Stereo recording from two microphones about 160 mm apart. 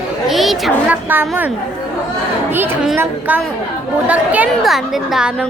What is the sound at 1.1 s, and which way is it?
Speech, 10° right (ahead or behind).